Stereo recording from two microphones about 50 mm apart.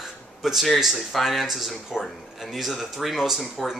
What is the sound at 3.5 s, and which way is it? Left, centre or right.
Speech, centre.